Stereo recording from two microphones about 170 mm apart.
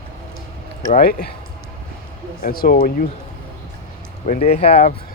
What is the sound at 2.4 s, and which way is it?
Speech, 60° left (ahead or behind).